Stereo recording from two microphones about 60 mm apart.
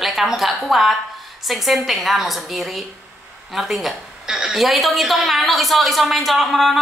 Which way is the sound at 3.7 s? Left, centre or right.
Centre.